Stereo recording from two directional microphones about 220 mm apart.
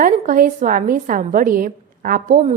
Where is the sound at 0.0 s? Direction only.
35° right (ahead or behind).